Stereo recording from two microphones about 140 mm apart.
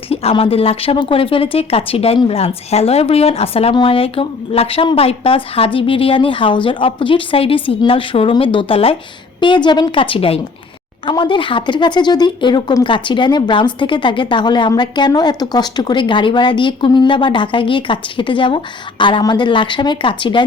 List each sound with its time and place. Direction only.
0.1 s a woman's voice: 45° left (ahead or behind)